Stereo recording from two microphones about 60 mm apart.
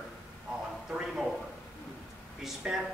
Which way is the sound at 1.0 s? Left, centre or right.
Centre.